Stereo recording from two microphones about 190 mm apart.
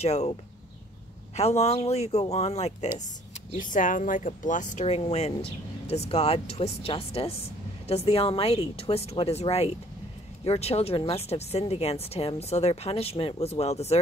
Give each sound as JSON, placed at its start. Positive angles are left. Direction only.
{"t": 0.0, "sound": "speech", "side_deg": 35}
{"t": 1.3, "sound": "speech", "side_deg": 35}